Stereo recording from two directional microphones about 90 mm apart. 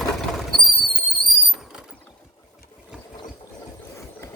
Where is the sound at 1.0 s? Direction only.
Centre (ahead or behind).